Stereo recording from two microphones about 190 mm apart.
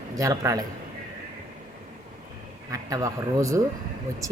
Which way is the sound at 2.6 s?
15° right (ahead or behind).